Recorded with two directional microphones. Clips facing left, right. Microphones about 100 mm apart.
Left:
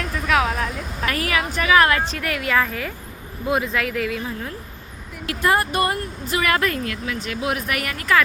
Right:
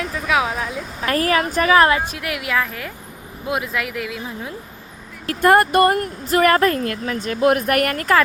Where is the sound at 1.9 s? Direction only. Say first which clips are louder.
Right 1 dB; 15° right (ahead or behind).